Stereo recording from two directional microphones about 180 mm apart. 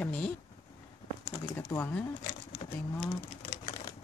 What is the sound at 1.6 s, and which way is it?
Speech, 10° left (ahead or behind).